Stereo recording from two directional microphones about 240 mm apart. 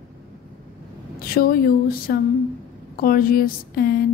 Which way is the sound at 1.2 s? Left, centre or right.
Left.